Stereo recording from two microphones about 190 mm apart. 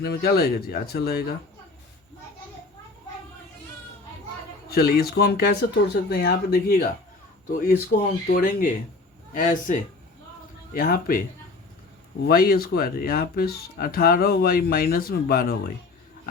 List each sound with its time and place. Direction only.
0.0 s speech: 55° left (ahead or behind)
4.7 s speech: 55° left (ahead or behind)
10.8 s speech: 50° left (ahead or behind)
12.2 s speech: 50° left (ahead or behind)